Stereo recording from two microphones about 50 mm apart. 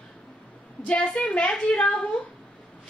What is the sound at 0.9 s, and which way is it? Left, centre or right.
Speech, centre.